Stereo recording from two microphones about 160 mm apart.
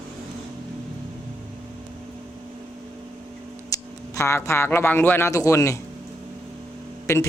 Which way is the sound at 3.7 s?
20° left (ahead or behind).